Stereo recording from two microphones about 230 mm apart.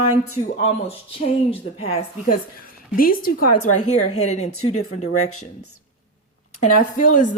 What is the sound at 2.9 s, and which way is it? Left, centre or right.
Speech, left.